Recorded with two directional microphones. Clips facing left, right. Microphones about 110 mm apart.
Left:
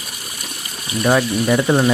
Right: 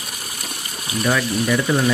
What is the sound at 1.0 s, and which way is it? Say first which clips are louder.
Speech: left 4 dB; 35° left (ahead or behind).